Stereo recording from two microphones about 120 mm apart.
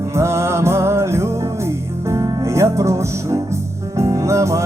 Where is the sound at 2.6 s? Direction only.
25° right (ahead or behind).